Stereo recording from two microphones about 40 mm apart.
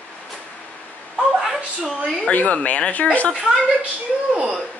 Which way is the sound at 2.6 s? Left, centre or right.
Left.